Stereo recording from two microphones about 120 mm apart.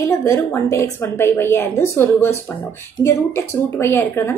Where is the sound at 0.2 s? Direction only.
25° left (ahead or behind).